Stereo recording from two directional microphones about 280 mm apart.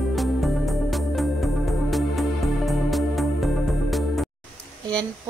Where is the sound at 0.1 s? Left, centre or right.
Centre.